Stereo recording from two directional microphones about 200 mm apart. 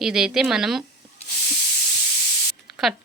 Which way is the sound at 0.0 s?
5° right (ahead or behind).